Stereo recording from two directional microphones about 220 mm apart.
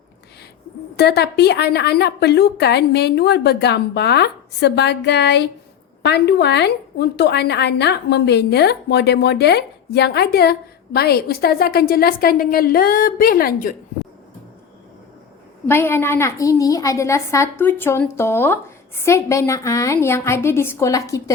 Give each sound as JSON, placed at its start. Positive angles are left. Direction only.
{"t": 0.9, "sound": "a woman's voice", "side_deg": 50}
{"t": 15.6, "sound": "a woman's voice", "side_deg": 10}